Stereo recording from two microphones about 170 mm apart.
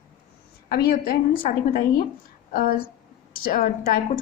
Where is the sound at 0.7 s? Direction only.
65° left (ahead or behind).